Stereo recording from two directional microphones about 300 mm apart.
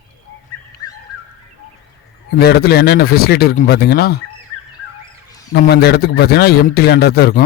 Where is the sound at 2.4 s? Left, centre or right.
Left.